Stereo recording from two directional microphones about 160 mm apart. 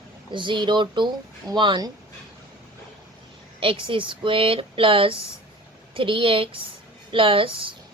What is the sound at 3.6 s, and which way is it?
A woman's voice, 35° right (ahead or behind).